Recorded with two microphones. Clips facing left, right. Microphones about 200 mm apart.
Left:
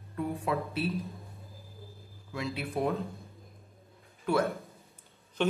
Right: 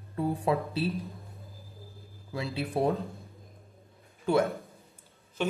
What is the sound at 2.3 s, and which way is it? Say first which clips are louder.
Speech: right 2 dB; 30° right (ahead or behind).